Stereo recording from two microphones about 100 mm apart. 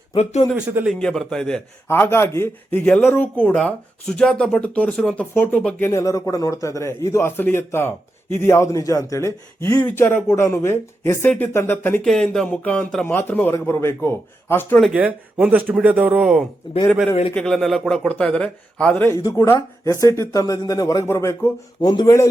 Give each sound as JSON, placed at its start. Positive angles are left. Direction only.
{"t": 0.5, "sound": "speech", "side_deg": -15}
{"t": 0.9, "sound": "a man's voice", "side_deg": 5}
{"t": 1.9, "sound": "a man's voice", "side_deg": 25}
{"t": 2.8, "sound": "a man's voice", "side_deg": 10}
{"t": 3.5, "sound": "a man's voice", "side_deg": 5}
{"t": 5.8, "sound": "a man's voice", "side_deg": 35}
{"t": 12.0, "sound": "a man's voice", "side_deg": 5}
{"t": 14.9, "sound": "speech", "side_deg": -15}
{"t": 17.3, "sound": "a man's voice", "side_deg": 5}
{"t": 19.0, "sound": "speech", "side_deg": 35}
{"t": 21.8, "sound": "speech", "side_deg": 45}